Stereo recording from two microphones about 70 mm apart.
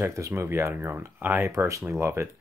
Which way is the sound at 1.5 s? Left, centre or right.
Right.